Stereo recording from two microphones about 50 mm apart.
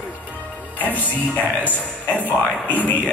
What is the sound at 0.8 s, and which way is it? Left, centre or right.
Music, left.